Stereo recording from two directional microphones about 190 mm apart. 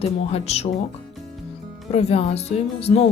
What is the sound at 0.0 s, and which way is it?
Speech, 30° left (ahead or behind).